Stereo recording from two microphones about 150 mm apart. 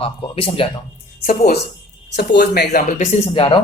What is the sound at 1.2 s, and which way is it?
Speech, 60° left (ahead or behind).